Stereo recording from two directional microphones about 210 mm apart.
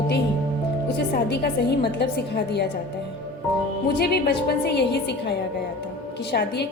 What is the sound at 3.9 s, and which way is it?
A woman's voice, 50° left (ahead or behind).